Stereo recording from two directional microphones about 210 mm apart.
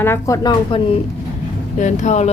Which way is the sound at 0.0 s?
15° left (ahead or behind).